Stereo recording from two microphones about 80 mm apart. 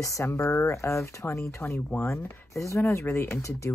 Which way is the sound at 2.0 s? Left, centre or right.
Left.